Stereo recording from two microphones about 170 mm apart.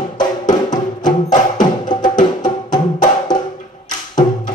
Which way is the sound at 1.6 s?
25° left (ahead or behind).